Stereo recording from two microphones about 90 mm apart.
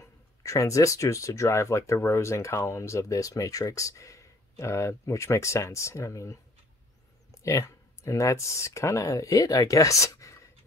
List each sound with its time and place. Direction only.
0.0 s speech: 35° left (ahead or behind)
7.4 s speech: 35° left (ahead or behind)